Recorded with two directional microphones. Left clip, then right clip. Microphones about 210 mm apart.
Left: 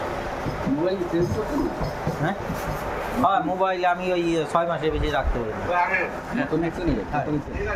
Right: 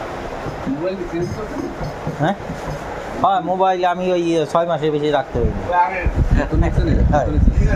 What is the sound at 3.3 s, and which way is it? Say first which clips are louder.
Speech: right 8 dB; 30° right (ahead or behind).